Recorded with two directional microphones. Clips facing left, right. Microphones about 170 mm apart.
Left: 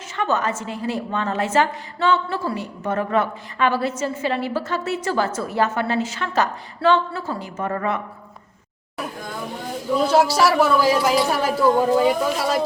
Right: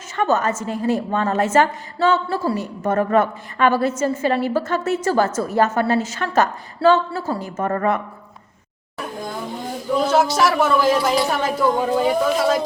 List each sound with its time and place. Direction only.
0.2 s a woman's voice: 45° right (ahead or behind)
10.1 s a woman's voice: 10° left (ahead or behind)